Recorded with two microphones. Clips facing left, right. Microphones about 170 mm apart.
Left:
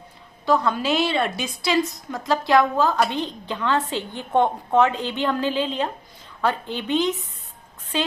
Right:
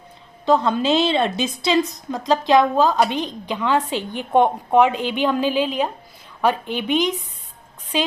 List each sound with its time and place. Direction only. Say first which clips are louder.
0.4 s a woman's voice: right 3 dB; 20° right (ahead or behind)